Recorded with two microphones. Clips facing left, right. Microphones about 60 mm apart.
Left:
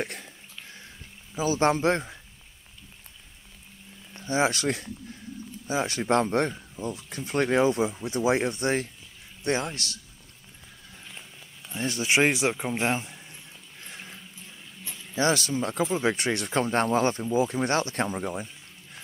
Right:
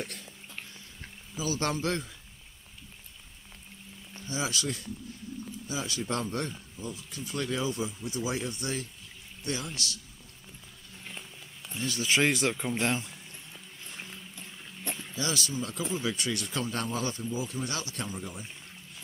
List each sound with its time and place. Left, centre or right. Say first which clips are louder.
0.0 s a sound: left 6 dB; left
1.3 s speech: left 8 dB; left
4.1 s speech: left 8 dB; left
11.7 s speech: left 4 dB; left
12.3 s speech: left 3 dB; centre
15.1 s speech: left 9 dB; left
18.0 s speech: left 8 dB; left